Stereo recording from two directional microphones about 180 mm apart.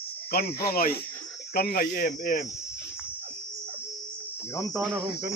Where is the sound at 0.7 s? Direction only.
55° left (ahead or behind).